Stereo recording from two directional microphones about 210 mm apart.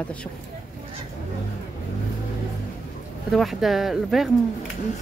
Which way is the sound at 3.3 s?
Centre (ahead or behind).